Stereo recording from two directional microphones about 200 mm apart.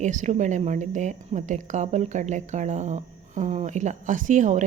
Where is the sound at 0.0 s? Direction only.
35° right (ahead or behind).